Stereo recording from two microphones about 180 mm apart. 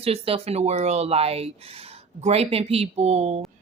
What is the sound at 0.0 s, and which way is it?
A woman's voice, 35° right (ahead or behind).